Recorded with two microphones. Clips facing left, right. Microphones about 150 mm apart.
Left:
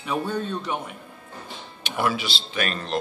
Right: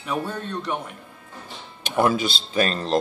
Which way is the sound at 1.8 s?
45° right (ahead or behind).